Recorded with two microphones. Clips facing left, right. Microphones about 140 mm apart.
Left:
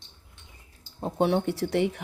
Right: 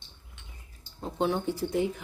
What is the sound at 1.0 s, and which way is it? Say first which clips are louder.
Speech: left 6 dB; 45° left (ahead or behind).